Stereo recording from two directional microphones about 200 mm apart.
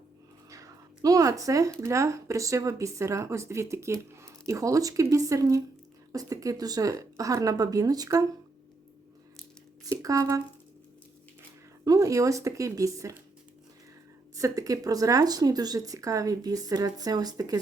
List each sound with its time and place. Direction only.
0.5 s a sound: 15° right (ahead or behind)
1.8 s speech: 15° right (ahead or behind)
9.9 s speech: 15° right (ahead or behind)
11.9 s speech: 15° right (ahead or behind)
14.3 s speech: 15° right (ahead or behind)